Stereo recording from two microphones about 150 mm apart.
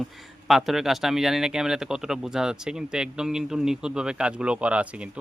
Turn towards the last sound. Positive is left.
turn(degrees=-10)  # may be behind; listen again after turning